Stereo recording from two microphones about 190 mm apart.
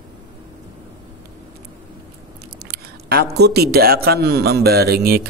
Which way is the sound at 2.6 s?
55° right (ahead or behind).